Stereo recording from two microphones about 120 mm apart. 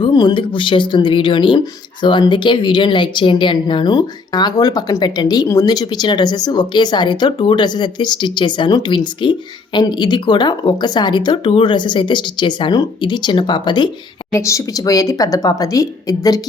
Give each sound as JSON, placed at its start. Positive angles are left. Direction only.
{"t": 0.0, "sound": "speech", "side_deg": 40}
{"t": 14.3, "sound": "speech", "side_deg": 25}